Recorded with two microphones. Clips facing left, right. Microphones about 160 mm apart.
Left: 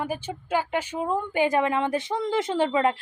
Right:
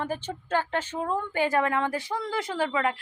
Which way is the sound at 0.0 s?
10° left (ahead or behind).